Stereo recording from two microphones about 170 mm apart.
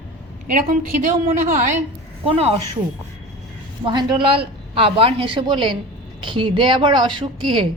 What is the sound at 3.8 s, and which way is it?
A woman's voice, 25° right (ahead or behind).